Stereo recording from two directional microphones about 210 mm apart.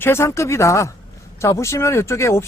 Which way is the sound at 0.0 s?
10° left (ahead or behind).